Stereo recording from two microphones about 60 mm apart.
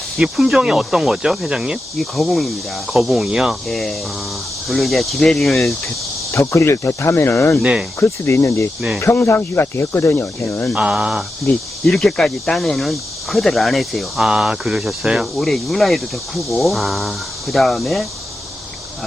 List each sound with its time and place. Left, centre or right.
0.2 s speech: centre
2.0 s speech: centre
3.7 s speech: centre
6.3 s speech: left
7.6 s speech: centre
7.9 s speech: left
10.8 s speech: centre
11.9 s speech: centre
14.3 s speech: centre
15.4 s speech: centre